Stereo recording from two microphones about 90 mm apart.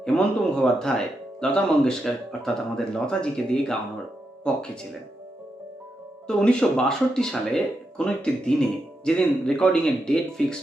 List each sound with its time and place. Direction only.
0.0 s speech: 10° left (ahead or behind)
6.2 s speech: 10° left (ahead or behind)